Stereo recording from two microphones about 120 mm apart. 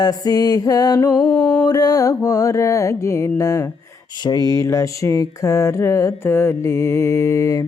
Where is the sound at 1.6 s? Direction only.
30° left (ahead or behind).